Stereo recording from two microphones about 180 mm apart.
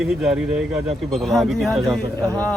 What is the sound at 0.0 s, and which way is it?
Speech, centre (ahead or behind).